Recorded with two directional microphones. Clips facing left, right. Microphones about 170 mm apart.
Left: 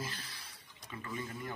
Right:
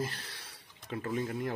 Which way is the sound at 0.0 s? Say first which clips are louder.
Right 6 dB; 75° right (ahead or behind).